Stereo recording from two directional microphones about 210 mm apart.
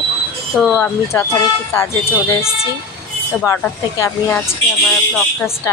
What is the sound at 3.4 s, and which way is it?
Speech, 10° left (ahead or behind).